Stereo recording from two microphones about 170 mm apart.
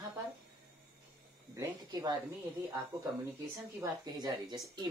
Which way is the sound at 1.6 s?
25° right (ahead or behind).